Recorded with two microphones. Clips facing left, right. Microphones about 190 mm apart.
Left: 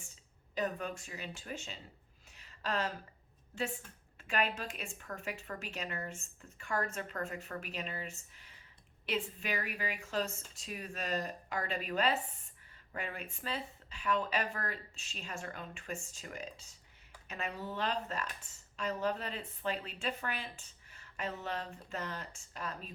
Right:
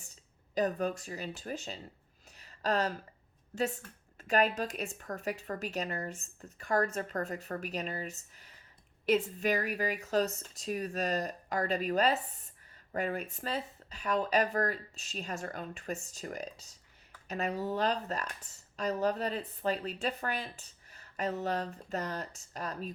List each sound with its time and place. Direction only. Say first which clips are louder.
0.5 s speech: right 6 dB; 40° right (ahead or behind)
2.3 s a sound: right 6 dB; 40° right (ahead or behind)
4.2 s speech: right 6 dB; 40° right (ahead or behind)